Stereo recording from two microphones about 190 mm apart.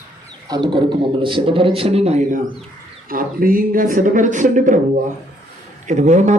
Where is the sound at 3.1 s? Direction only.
50° right (ahead or behind).